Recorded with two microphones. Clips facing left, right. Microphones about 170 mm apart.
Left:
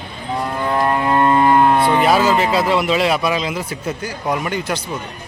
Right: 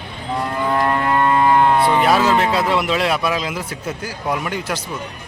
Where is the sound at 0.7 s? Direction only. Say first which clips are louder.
Left 2 dB; 15° left (ahead or behind).